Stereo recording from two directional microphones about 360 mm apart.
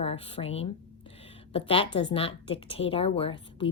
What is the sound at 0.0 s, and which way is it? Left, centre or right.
A woman's voice, centre.